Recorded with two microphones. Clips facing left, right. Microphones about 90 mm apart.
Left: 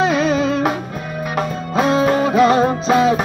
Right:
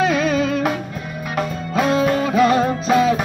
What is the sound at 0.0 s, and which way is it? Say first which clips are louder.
Music: left 2 dB; 20° left (ahead or behind).